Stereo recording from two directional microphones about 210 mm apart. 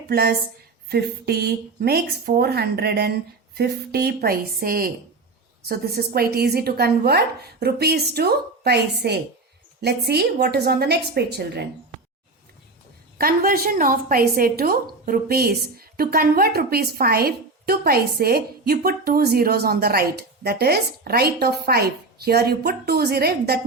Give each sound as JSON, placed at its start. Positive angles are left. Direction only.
{"t": 0.1, "sound": "a woman's voice", "side_deg": -45}
{"t": 13.1, "sound": "a woman's voice", "side_deg": -45}